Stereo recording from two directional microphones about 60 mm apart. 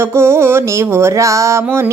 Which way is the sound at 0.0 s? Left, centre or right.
Right.